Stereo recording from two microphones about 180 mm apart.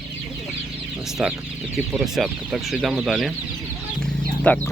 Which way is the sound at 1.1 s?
Centre (ahead or behind).